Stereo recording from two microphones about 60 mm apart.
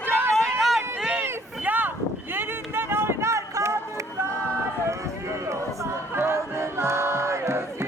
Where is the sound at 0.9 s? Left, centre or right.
Centre.